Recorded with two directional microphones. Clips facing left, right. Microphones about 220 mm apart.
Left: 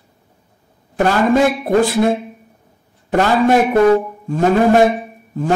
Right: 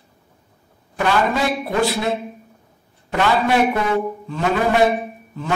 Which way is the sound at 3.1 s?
45° left (ahead or behind).